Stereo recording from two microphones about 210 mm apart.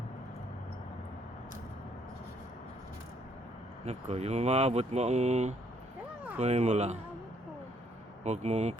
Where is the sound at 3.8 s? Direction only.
30° right (ahead or behind).